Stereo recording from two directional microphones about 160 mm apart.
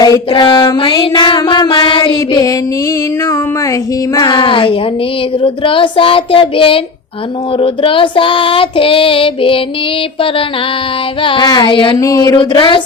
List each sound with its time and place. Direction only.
0.0 s music: 30° left (ahead or behind)
4.1 s child singing: 25° left (ahead or behind)
11.2 s child singing: 30° left (ahead or behind)
11.9 s music: 20° left (ahead or behind)